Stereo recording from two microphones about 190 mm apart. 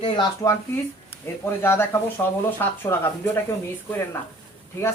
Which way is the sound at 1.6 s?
10° left (ahead or behind).